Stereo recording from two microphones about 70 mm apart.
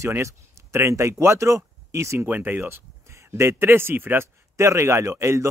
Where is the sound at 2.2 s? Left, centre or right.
Right.